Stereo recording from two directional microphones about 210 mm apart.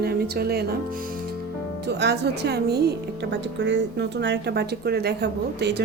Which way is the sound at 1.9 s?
55° right (ahead or behind).